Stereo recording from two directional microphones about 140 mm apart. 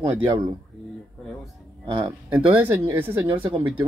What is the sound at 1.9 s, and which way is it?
Speech, 30° right (ahead or behind).